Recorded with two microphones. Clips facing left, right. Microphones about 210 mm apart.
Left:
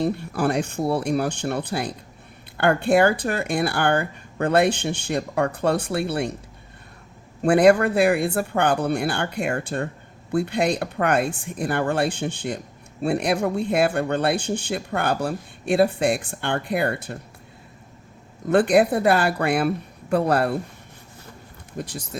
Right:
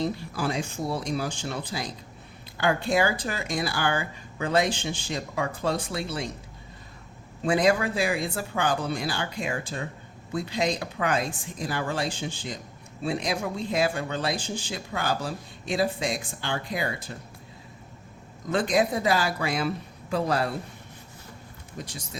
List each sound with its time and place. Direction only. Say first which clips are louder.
0.0 s speech: left 6 dB; 60° left (ahead or behind)
7.4 s speech: left 7 dB; 60° left (ahead or behind)
18.4 s speech: left 7 dB; 60° left (ahead or behind)
21.8 s speech: left 7 dB; 55° left (ahead or behind)